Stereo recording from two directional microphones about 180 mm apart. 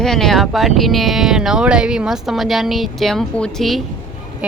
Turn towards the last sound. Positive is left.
turn(degrees=-5)  # may be behind; listen again after turning